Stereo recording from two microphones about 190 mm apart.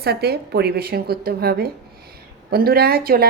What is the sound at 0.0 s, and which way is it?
A woman's voice, 55° right (ahead or behind).